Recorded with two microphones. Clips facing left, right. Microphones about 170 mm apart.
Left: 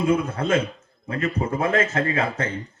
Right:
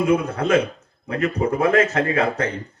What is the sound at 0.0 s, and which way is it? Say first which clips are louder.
A man's voice: right 2 dB; 25° left (ahead or behind).